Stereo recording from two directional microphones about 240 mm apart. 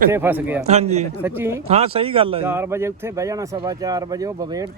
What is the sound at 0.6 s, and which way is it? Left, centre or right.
Speech, right.